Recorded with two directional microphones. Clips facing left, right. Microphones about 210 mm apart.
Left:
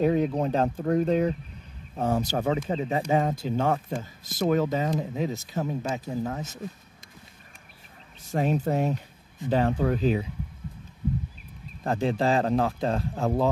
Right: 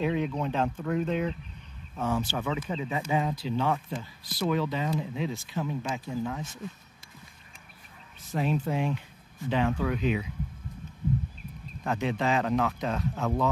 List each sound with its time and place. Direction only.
0.0 s speech: 40° left (ahead or behind)
8.2 s speech: 45° left (ahead or behind)
11.8 s speech: 35° left (ahead or behind)